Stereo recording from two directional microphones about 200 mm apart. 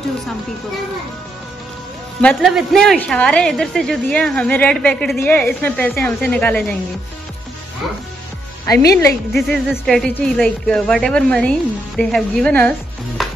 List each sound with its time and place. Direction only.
2.2 s speech: centre (ahead or behind)
8.6 s speech: 15° left (ahead or behind)
9.3 s speech: centre (ahead or behind)
13.2 s music: centre (ahead or behind)